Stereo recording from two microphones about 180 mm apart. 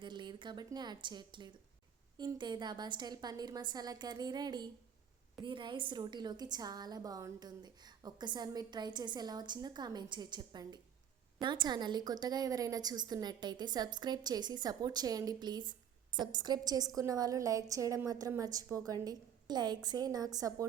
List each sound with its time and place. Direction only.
0.0 s a woman's voice: 25° right (ahead or behind)